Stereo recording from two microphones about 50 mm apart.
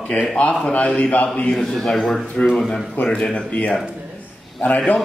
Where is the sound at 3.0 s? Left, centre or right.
Left.